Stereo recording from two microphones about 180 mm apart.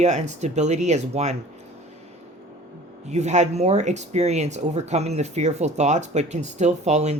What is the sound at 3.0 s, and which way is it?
Speech, 40° right (ahead or behind).